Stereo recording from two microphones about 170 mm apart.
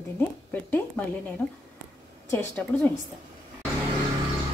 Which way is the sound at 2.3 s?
10° left (ahead or behind).